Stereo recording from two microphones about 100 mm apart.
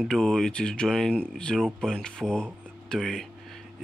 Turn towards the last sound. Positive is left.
turn(degrees=5)  # may be behind; listen again after turning